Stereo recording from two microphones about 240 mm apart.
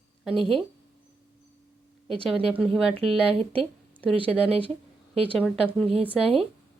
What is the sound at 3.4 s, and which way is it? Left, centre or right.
Speech, right.